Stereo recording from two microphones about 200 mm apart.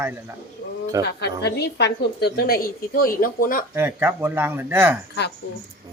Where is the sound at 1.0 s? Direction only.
55° left (ahead or behind).